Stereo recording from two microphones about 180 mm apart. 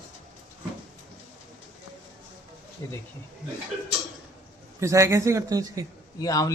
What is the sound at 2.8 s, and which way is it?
Speech, 20° left (ahead or behind).